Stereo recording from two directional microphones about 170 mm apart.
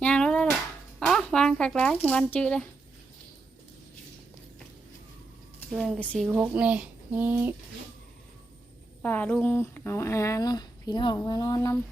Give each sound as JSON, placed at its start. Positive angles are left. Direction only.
{"t": 0.0, "sound": "a sound", "side_deg": 5}
{"t": 0.9, "sound": "shuffling cards", "side_deg": 5}
{"t": 5.7, "sound": "speech", "side_deg": 0}
{"t": 6.2, "sound": "speech", "side_deg": -10}
{"t": 9.0, "sound": "speech", "side_deg": 10}